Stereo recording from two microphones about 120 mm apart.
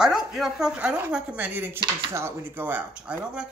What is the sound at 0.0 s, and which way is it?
Speech, 5° right (ahead or behind).